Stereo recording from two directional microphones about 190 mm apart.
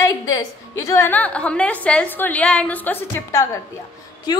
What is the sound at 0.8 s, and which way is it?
A woman's voice, 15° left (ahead or behind).